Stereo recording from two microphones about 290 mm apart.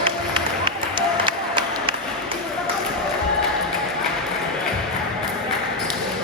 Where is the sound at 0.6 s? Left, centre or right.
Centre.